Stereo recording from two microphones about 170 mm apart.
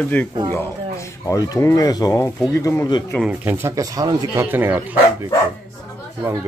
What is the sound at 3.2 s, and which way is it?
Speech, 10° right (ahead or behind).